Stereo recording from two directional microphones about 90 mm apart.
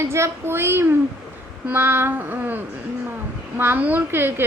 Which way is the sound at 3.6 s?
20° right (ahead or behind).